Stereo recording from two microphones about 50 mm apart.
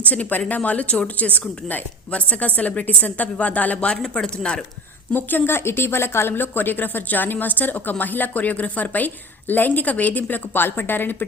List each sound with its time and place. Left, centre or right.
0.0 s speech: left
4.1 s speech: centre
5.1 s speech: left